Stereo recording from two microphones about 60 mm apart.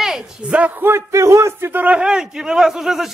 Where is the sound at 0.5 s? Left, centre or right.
Right.